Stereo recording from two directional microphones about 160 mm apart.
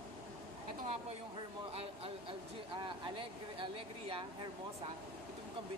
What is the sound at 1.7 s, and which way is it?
Speech, 40° right (ahead or behind).